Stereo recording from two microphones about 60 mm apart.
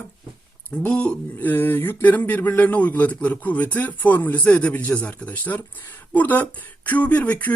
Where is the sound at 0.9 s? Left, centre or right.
Left.